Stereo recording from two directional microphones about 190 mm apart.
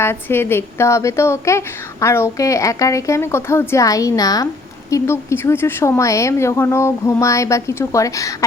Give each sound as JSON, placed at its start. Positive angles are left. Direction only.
{"t": 0.0, "sound": "a woman's voice", "side_deg": 10}